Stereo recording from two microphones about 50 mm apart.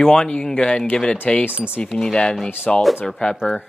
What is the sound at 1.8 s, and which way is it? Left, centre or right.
Speech, centre.